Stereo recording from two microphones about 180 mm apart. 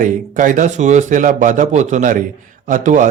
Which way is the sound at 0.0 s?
45° right (ahead or behind).